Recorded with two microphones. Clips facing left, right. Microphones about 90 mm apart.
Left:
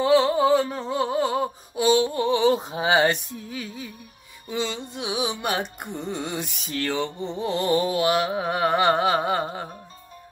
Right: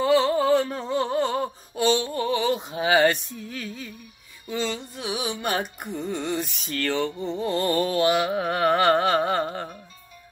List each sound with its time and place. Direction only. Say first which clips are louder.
0.0 s a sound: left 2 dB; 5° left (ahead or behind); by 3.2 s 20° left (ahead or behind)
3.4 s carnatic music: even; 10° left (ahead or behind)
4.5 s music: even; 15° left (ahead or behind)
6.5 s carnatic music: right 1 dB; 10° left (ahead or behind)